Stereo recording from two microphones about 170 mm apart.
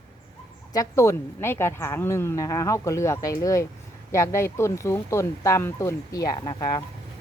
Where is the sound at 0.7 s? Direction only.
15° left (ahead or behind).